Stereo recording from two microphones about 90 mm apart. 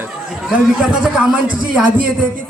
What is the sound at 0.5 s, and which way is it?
A man's voice, 10° right (ahead or behind).